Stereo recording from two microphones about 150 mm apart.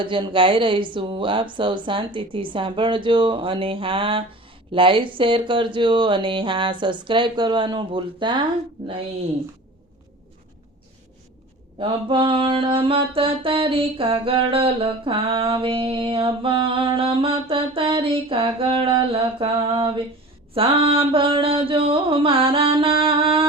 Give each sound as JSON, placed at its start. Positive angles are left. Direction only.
{"t": 0.0, "sound": "speech", "side_deg": -35}
{"t": 11.8, "sound": "speech", "side_deg": -35}